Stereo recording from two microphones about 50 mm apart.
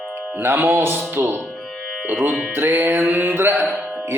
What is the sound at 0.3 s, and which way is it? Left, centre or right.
Music, right.